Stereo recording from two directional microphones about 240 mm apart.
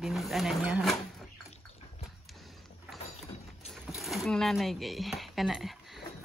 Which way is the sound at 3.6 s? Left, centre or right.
Centre.